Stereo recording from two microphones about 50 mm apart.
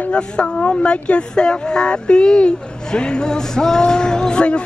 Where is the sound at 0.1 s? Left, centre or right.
Centre.